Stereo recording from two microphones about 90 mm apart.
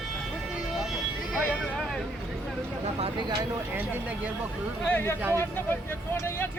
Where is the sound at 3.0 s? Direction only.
90° right.